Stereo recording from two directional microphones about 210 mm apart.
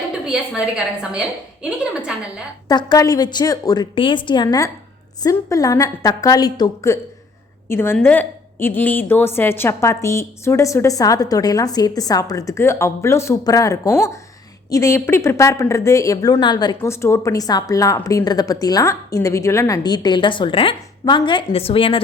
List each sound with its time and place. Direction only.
0.3 s a woman's voice: 5° right (ahead or behind)
2.6 s a woman's voice: 20° left (ahead or behind)